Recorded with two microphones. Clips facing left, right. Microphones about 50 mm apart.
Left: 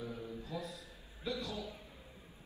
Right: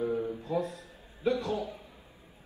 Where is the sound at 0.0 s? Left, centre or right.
Right.